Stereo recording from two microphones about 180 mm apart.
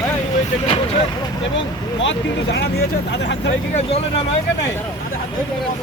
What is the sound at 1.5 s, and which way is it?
Speech, 90° left.